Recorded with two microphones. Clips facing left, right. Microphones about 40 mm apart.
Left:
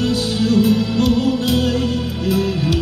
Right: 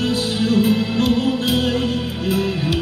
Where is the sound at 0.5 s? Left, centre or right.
Right.